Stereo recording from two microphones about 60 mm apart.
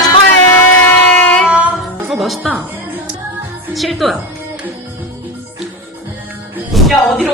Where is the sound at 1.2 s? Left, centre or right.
Centre.